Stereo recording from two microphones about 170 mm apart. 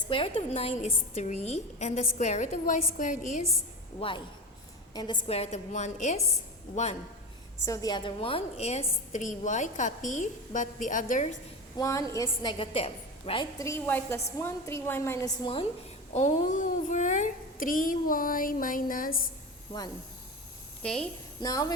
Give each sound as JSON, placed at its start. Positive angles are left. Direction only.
{"t": 0.1, "sound": "a woman's voice", "side_deg": 30}
{"t": 4.0, "sound": "a woman's voice", "side_deg": 35}
{"t": 7.6, "sound": "a woman's voice", "side_deg": 20}
{"t": 11.8, "sound": "a woman's voice", "side_deg": 20}
{"t": 13.6, "sound": "a woman's voice", "side_deg": 15}
{"t": 16.1, "sound": "a woman's voice", "side_deg": 45}
{"t": 20.8, "sound": "a woman's voice", "side_deg": 5}
{"t": 21.4, "sound": "a woman's voice", "side_deg": 20}